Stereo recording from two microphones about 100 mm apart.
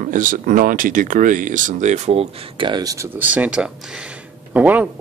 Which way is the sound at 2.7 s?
35° right (ahead or behind).